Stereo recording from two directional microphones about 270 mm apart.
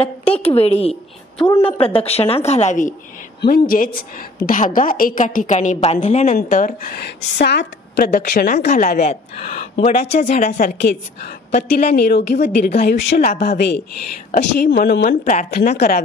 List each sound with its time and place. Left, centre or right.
0.0 s a woman's voice: left